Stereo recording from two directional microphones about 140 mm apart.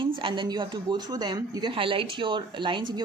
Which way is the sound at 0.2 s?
35° right (ahead or behind).